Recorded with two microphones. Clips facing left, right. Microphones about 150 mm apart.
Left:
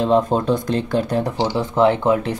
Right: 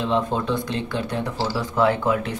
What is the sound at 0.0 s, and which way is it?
Speech, 40° left (ahead or behind).